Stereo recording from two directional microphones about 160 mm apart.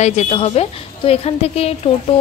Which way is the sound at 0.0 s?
45° left (ahead or behind).